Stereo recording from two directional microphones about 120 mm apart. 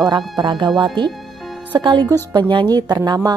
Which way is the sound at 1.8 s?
40° right (ahead or behind).